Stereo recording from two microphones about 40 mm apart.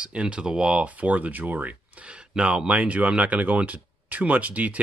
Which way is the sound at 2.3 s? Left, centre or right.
Right.